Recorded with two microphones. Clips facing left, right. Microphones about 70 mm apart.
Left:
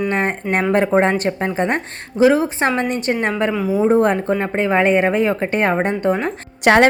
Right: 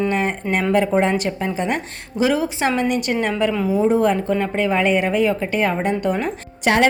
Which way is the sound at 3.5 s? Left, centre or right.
Centre.